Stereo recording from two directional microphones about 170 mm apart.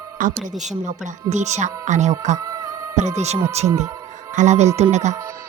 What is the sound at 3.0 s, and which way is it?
Speech, 40° right (ahead or behind).